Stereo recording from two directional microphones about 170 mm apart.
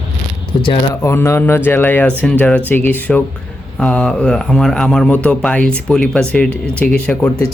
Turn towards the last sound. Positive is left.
turn(degrees=10)  # may be behind; listen again after turning